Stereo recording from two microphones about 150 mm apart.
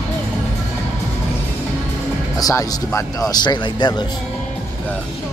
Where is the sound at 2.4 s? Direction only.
20° left (ahead or behind).